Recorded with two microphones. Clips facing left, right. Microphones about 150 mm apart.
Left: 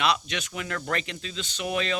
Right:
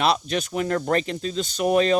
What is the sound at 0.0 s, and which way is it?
Speech, 35° right (ahead or behind).